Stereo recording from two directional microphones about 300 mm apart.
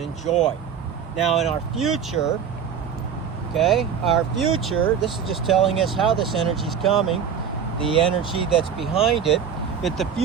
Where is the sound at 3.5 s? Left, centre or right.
Centre.